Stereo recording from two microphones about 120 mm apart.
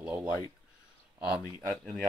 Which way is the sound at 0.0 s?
10° right (ahead or behind).